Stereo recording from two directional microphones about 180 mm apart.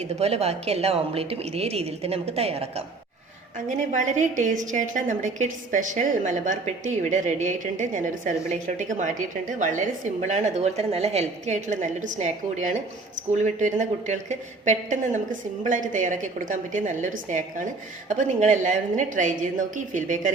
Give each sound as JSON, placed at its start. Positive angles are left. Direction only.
{"t": 0.0, "sound": "a woman's voice", "side_deg": -35}